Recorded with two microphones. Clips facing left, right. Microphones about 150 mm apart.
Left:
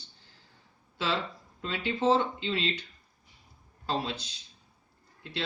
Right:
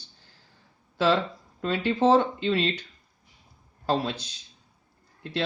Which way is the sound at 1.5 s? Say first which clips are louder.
Right 7 dB; 45° right (ahead or behind).